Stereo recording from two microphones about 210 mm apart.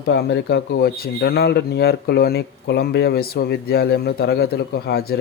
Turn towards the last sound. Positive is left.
turn(degrees=50)  # may be behind; listen again after turning